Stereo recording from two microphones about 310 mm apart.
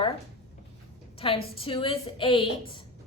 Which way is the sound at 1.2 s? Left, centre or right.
Centre.